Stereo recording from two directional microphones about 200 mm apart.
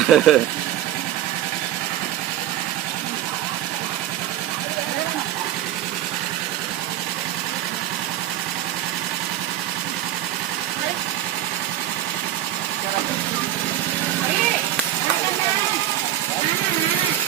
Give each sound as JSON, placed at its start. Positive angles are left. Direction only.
{"t": 0.1, "sound": "speech", "side_deg": 0}